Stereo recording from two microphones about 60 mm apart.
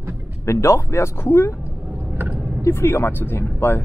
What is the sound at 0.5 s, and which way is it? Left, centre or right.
Speech, left.